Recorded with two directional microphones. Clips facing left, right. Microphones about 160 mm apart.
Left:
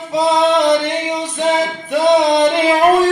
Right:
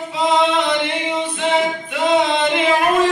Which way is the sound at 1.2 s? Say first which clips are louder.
Left 1 dB; 40° left (ahead or behind).